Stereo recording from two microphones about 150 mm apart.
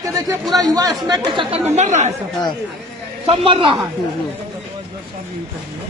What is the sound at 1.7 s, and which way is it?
Speech, 50° right (ahead or behind).